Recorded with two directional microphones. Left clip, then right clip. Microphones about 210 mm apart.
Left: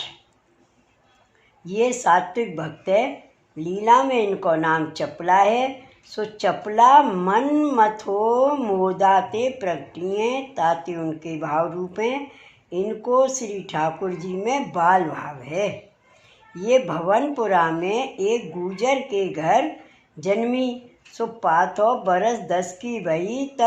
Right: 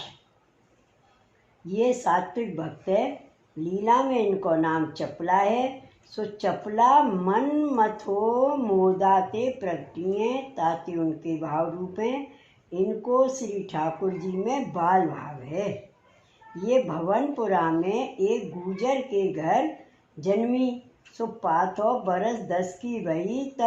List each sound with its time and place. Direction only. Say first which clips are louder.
1.6 s speech: left 4 dB; 30° left (ahead or behind)